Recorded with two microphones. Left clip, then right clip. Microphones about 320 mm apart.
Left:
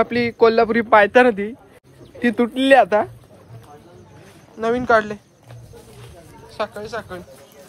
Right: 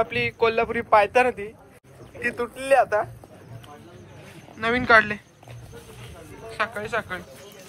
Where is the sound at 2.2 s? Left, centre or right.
Left.